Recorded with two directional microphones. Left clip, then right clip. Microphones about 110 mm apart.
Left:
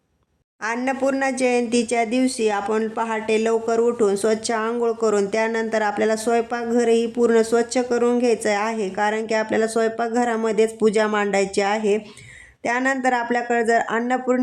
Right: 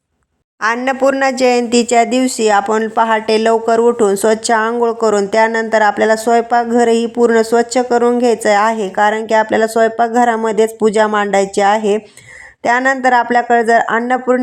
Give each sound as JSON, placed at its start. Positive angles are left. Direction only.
{"t": 0.6, "sound": "speech", "side_deg": -30}
{"t": 1.9, "sound": "speech", "side_deg": -50}
{"t": 4.8, "sound": "speech", "side_deg": -35}